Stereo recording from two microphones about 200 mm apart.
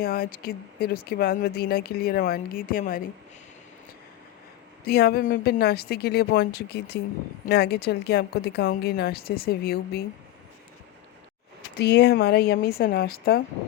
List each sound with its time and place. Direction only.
0.0 s speech: 50° left (ahead or behind)
4.9 s speech: 50° left (ahead or behind)
11.8 s speech: 55° left (ahead or behind)